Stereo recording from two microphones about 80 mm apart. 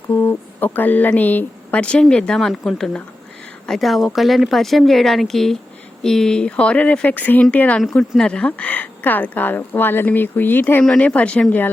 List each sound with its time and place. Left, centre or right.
0.1 s a woman's voice: left
7.8 s a woman's voice: centre; by 10.8 s left
10.8 s speech: centre